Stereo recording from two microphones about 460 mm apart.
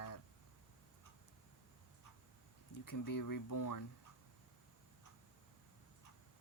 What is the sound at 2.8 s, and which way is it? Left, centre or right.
Speech, left.